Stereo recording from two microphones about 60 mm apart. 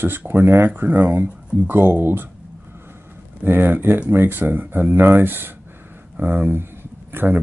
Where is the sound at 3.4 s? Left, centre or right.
Right.